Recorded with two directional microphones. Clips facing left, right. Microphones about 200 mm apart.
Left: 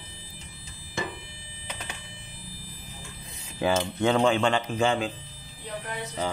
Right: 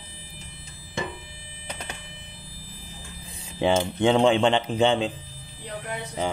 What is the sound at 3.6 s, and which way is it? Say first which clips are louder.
Speech: right 3 dB; 25° right (ahead or behind).